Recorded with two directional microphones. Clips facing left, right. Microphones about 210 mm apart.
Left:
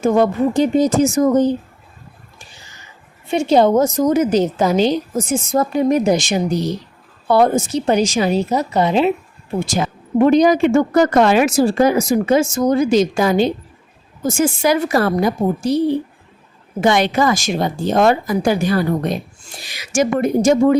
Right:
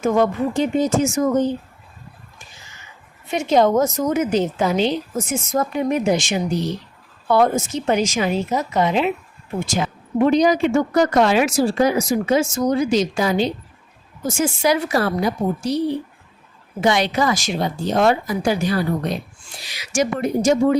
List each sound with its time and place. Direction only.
0.0 s a woman's voice: 35° left (ahead or behind)
3.2 s a woman's voice: 30° left (ahead or behind); by 15.8 s 50° left (ahead or behind)
16.8 s a woman's voice: 50° left (ahead or behind)